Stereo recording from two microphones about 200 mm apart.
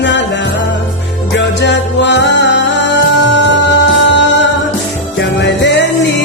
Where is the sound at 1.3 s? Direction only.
60° left (ahead or behind).